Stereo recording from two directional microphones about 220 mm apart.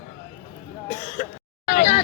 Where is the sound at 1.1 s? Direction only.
35° left (ahead or behind).